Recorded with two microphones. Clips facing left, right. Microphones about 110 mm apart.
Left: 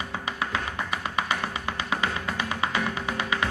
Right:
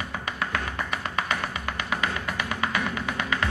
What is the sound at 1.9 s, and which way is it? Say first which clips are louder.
Music: even; 25° left (ahead or behind).